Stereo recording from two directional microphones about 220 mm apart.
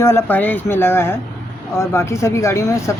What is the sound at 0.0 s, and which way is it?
Speech, 10° left (ahead or behind).